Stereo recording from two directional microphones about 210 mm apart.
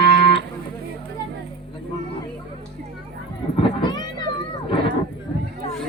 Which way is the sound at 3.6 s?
20° left (ahead or behind).